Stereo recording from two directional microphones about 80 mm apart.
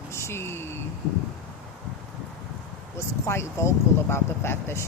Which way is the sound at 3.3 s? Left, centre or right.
Left.